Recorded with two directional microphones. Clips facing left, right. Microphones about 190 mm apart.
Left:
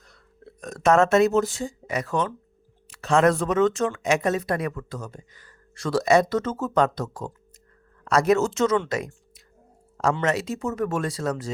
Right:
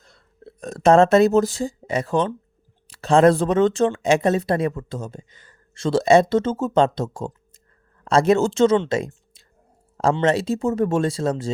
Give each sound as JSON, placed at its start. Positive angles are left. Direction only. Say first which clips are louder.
{"t": 0.0, "sound": "speech", "louder": "right 3 dB", "side_deg": -30}